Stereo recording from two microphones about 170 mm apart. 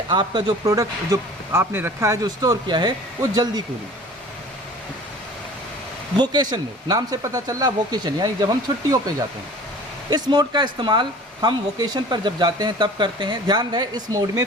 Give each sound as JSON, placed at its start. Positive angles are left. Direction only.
{"t": 0.1, "sound": "speech", "side_deg": -25}
{"t": 6.1, "sound": "speech", "side_deg": -25}